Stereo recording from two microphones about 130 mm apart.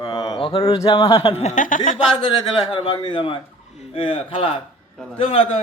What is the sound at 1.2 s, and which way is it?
Speech, 55° left (ahead or behind).